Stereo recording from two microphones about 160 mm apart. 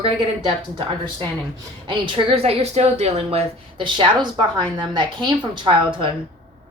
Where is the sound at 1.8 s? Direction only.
35° right (ahead or behind).